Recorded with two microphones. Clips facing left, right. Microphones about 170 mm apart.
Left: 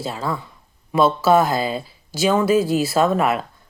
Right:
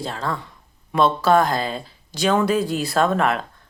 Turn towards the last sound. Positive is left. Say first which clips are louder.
# left 2 dB
turn(degrees=5)  # may be behind; listen again after turning